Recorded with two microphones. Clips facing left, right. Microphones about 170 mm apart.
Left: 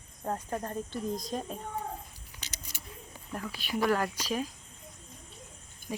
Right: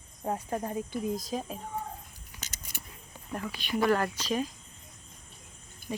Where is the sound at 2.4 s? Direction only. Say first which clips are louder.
Right 1 dB; 50° right (ahead or behind).